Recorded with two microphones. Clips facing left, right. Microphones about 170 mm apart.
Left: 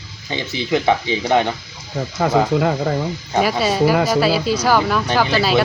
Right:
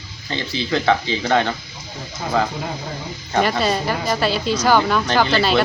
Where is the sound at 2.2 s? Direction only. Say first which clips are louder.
Left 4 dB; 70° left (ahead or behind).